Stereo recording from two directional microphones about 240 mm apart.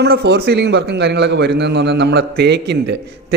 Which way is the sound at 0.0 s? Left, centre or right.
Right.